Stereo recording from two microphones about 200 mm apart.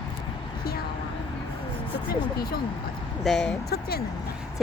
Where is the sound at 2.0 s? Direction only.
50° left (ahead or behind).